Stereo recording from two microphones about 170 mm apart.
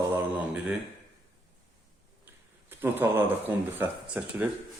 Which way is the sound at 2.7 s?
10° right (ahead or behind).